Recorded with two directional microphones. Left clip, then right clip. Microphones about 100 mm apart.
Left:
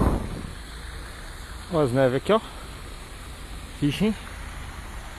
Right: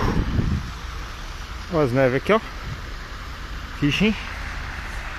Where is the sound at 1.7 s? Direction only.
20° left (ahead or behind).